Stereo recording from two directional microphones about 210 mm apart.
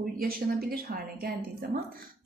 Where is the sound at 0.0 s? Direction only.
45° right (ahead or behind).